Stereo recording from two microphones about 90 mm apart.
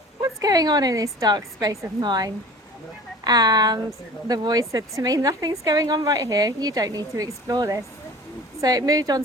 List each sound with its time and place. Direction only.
0.2 s a woman's voice: 45° right (ahead or behind)
2.0 s a woman's voice: 50° right (ahead or behind)